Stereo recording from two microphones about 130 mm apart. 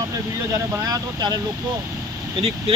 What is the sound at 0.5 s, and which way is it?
Speech, 25° right (ahead or behind).